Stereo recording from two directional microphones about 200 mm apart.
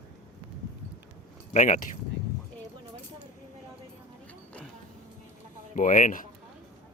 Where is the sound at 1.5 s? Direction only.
40° left (ahead or behind).